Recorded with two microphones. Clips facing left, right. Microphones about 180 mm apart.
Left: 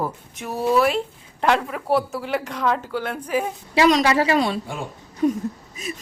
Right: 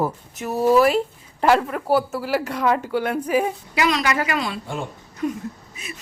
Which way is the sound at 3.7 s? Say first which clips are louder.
Left 6 dB; 35° left (ahead or behind).